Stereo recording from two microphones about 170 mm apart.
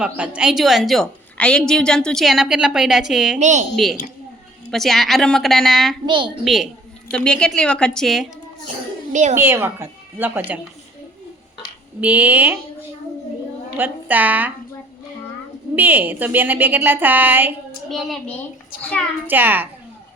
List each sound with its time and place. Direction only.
0.0 s a woman's voice: 5° right (ahead or behind)
3.3 s a woman's voice: 45° right (ahead or behind)
4.7 s a woman's voice: centre (ahead or behind)
6.1 s a woman's voice: 30° right (ahead or behind)
6.4 s a woman's voice: centre (ahead or behind)
9.3 s a woman's voice: 15° right (ahead or behind)
11.9 s a woman's voice: 10° right (ahead or behind)
13.7 s a woman's voice: 10° right (ahead or behind)
15.7 s a woman's voice: 10° right (ahead or behind)
17.8 s a woman's voice: centre (ahead or behind)
19.3 s a woman's voice: 10° right (ahead or behind)